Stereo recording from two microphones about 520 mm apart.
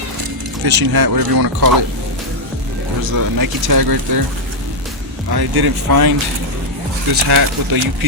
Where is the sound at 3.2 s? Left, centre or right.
Right.